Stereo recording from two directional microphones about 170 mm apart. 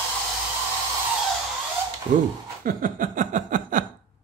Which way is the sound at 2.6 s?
55° right (ahead or behind).